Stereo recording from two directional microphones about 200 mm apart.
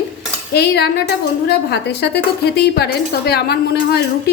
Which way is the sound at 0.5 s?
55° left (ahead or behind).